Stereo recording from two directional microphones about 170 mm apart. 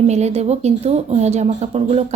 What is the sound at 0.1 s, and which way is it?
Speech, 40° right (ahead or behind).